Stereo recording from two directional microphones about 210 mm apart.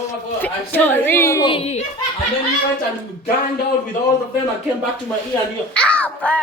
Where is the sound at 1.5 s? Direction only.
30° left (ahead or behind).